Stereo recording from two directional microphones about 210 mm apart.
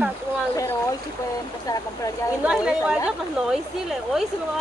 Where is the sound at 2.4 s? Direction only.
5° right (ahead or behind).